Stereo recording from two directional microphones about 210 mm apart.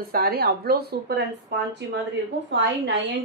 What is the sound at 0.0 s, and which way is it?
Speech, 45° right (ahead or behind).